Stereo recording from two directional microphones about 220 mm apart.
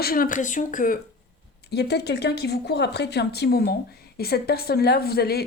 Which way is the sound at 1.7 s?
50° left (ahead or behind).